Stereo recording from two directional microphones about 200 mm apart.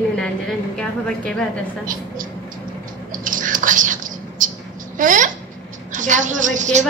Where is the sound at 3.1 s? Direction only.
40° right (ahead or behind).